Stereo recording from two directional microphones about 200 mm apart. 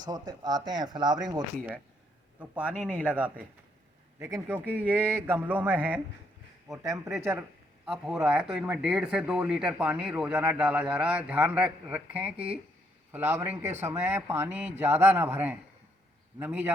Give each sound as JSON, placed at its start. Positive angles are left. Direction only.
{"t": 0.0, "sound": "speech", "side_deg": -20}
{"t": 2.4, "sound": "a man's voice", "side_deg": -5}
{"t": 7.9, "sound": "a man's voice", "side_deg": -5}